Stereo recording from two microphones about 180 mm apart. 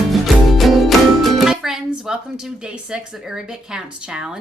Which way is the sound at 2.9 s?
5° right (ahead or behind).